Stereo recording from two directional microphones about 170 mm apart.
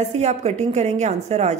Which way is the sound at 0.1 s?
40° right (ahead or behind).